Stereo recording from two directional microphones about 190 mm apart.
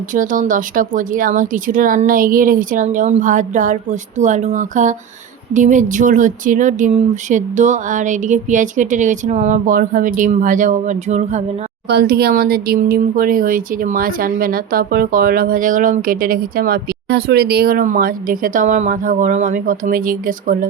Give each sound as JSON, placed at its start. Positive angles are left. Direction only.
{"t": 0.1, "sound": "speech", "side_deg": -45}
{"t": 11.9, "sound": "speech", "side_deg": -55}